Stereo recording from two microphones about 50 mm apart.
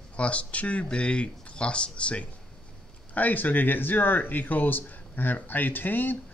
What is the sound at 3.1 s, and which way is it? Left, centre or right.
Speech, left.